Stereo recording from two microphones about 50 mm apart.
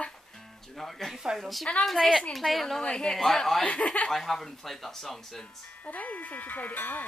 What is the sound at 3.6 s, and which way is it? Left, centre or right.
Speech, left.